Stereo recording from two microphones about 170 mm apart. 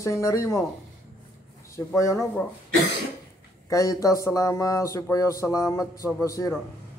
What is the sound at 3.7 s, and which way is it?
A man's voice, 20° left (ahead or behind).